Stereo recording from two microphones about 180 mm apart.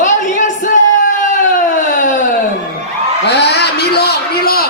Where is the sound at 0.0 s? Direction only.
45° left (ahead or behind).